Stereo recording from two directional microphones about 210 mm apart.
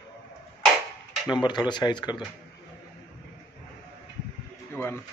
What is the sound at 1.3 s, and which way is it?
Speech, 20° left (ahead or behind).